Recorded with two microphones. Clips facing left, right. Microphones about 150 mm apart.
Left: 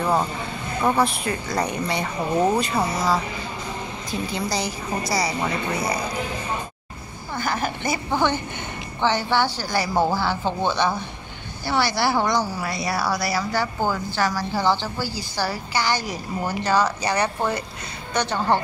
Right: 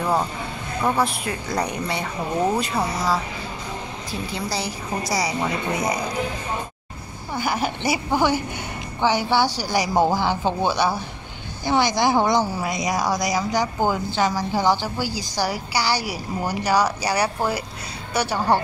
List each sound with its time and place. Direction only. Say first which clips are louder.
0.0 s a woman's voice: even; centre (ahead or behind); by 5.9 s 20° right (ahead or behind)
7.3 s a woman's voice: right 2 dB; 10° right (ahead or behind)